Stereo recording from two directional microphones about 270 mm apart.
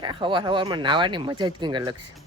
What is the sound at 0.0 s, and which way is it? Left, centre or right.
Speech, centre.